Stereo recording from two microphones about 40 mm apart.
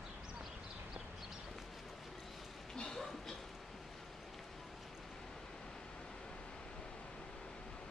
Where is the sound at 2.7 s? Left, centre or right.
Centre.